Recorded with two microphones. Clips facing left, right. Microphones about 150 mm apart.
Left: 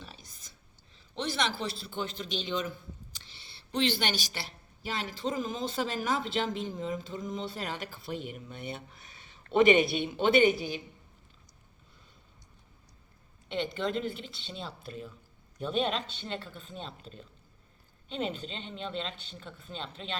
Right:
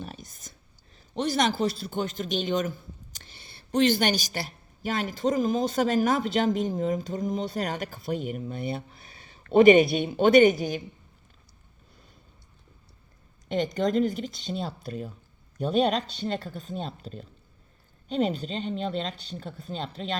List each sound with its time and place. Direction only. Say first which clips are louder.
0.0 s a sound: right 9 dB; 50° right (ahead or behind)
0.9 s a man's voice: right 7 dB; 45° right (ahead or behind)
13.5 s speech: right 6 dB; 40° right (ahead or behind)